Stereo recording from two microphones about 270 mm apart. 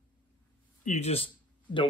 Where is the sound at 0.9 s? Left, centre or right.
Left.